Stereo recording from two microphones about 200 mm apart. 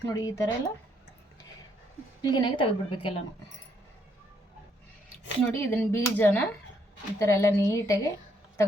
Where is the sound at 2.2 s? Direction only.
25° left (ahead or behind).